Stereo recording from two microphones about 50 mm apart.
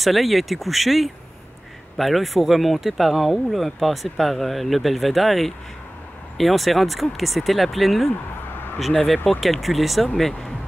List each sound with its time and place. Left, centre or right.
0.0 s speech: centre